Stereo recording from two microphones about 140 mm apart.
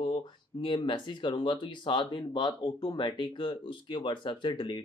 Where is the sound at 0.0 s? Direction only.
35° left (ahead or behind).